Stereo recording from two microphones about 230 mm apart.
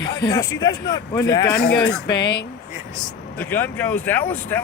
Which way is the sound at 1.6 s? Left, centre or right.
Left.